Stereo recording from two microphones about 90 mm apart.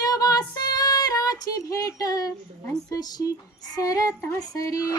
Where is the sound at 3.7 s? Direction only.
40° left (ahead or behind).